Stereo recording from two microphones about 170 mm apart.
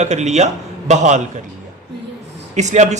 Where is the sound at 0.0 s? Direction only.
40° right (ahead or behind).